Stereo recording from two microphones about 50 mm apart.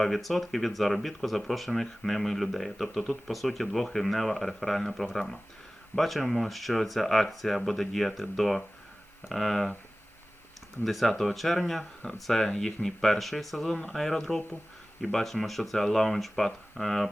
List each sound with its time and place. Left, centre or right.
0.0 s speech: centre
10.8 s speech: centre
13.7 s speech: left
13.9 s speech: centre